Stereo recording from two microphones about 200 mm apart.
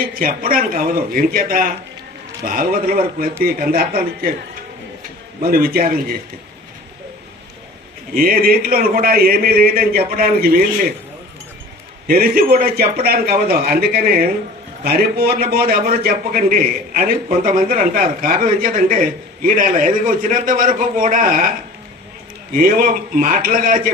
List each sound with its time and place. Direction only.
0.0 s a man's voice: 45° right (ahead or behind)
5.4 s a man's voice: 50° right (ahead or behind)
8.1 s a man's voice: 45° right (ahead or behind)
12.0 s a man's voice: 45° right (ahead or behind)
22.5 s a man's voice: 45° right (ahead or behind)